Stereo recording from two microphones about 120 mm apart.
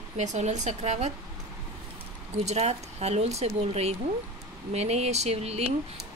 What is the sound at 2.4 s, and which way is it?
Speech, 65° right (ahead or behind).